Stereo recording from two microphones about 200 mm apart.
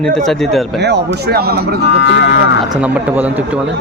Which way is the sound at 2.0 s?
60° left (ahead or behind).